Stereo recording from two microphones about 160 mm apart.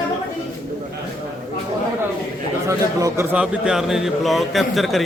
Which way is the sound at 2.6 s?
20° right (ahead or behind).